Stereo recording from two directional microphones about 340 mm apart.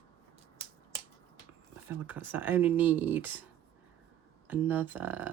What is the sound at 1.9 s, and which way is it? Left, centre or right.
Speech, centre.